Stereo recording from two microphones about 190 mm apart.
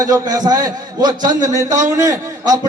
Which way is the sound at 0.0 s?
20° right (ahead or behind).